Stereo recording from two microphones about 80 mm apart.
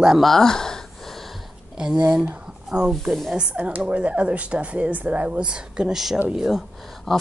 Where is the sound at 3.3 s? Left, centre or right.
Centre.